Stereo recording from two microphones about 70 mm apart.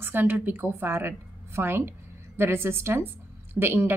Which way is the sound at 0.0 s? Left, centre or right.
Right.